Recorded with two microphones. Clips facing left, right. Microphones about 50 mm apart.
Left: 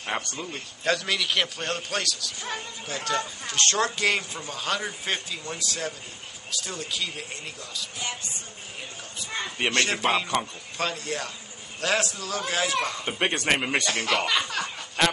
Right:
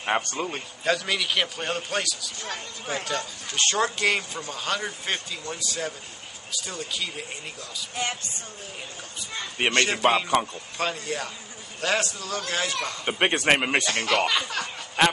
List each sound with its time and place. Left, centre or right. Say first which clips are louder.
0.2 s a man's voice: right 5 dB; right
0.8 s a man's voice: even; centre
9.7 s a man's voice: right 3 dB; centre
13.0 s speech: right 3 dB; centre
13.8 s a man's voice: right 2 dB; centre
15.0 s speech: right 3 dB; centre